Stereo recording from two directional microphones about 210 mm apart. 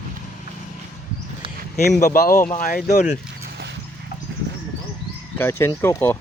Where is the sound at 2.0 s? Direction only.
45° left (ahead or behind).